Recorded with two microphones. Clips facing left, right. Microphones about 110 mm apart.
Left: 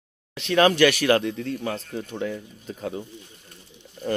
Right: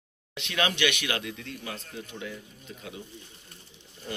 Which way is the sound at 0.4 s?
35° left (ahead or behind).